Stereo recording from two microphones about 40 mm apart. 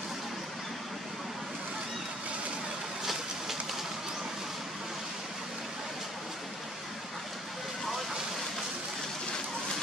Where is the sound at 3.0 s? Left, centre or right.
Centre.